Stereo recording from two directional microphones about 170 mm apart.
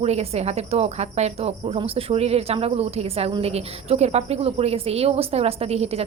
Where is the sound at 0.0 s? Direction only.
40° right (ahead or behind).